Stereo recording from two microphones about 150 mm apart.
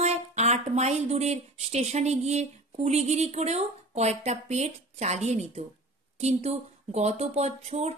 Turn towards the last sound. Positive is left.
turn(degrees=-45)  # may be behind; listen again after turning